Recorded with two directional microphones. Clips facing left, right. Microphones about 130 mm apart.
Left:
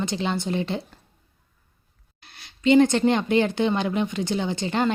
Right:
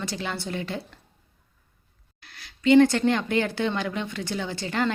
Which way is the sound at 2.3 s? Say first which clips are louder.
Even; 20° left (ahead or behind).